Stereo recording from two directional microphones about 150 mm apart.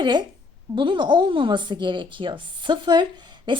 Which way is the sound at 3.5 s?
30° right (ahead or behind).